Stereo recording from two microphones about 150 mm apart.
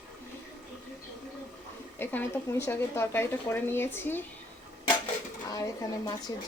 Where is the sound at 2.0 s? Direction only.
15° left (ahead or behind).